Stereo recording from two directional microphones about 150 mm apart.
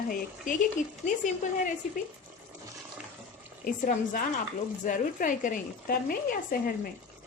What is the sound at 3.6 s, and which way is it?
Speech, 65° left (ahead or behind).